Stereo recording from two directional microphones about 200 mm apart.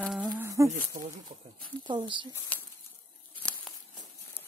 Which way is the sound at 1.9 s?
25° right (ahead or behind).